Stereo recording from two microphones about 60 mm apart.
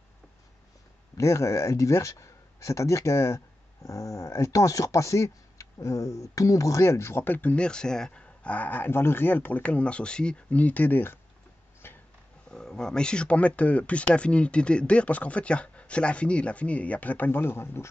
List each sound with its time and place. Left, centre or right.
1.1 s speech: left
7.2 s speech: left
7.5 s speech: centre; by 9.6 s left
9.6 s speech: left
11.8 s a sound: left
12.4 s speech: centre; by 17.8 s left